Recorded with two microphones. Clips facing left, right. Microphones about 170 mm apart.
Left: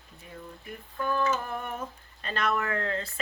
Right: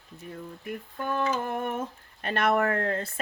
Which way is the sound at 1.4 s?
50° right (ahead or behind).